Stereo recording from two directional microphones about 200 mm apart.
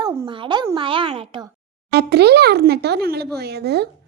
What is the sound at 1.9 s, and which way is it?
Speech, 55° right (ahead or behind).